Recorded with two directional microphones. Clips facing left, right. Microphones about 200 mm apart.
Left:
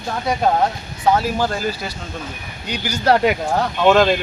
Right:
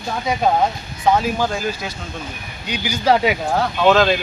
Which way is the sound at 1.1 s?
5° left (ahead or behind).